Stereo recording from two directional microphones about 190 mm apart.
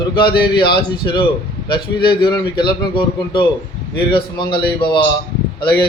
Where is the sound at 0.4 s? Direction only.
25° left (ahead or behind).